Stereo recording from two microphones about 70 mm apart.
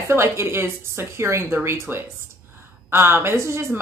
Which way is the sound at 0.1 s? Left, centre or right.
Right.